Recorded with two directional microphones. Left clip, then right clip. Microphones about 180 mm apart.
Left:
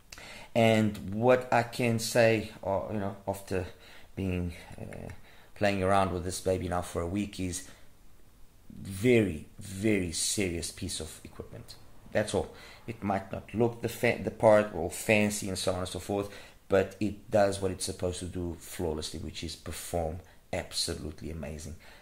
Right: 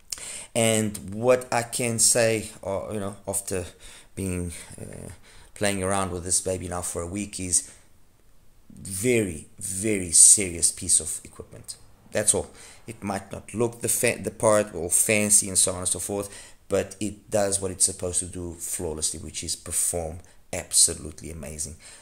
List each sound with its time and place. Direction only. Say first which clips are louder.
0.1 s speech: right 2 dB; 25° right (ahead or behind)
5.6 s speech: even; 30° right (ahead or behind); by 7.6 s 10° right (ahead or behind)
8.8 s speech: right 2 dB; 15° right (ahead or behind)